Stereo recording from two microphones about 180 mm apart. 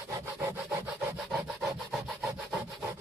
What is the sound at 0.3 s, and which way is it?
Wood, 15° right (ahead or behind).